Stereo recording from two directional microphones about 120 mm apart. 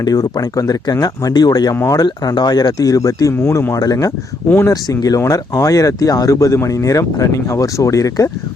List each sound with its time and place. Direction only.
0.0 s speech: 30° left (ahead or behind)
1.7 s speech: 20° left (ahead or behind)
2.0 s speech: 35° left (ahead or behind)
4.4 s speech: 20° left (ahead or behind)
4.7 s speech: 30° left (ahead or behind)